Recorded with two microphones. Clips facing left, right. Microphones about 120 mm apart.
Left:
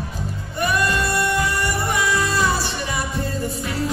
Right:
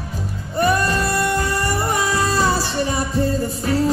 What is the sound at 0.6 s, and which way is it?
Music, 35° right (ahead or behind).